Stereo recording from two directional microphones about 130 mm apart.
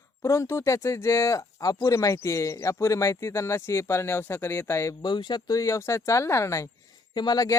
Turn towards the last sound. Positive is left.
turn(degrees=30)  # may be behind; listen again after turning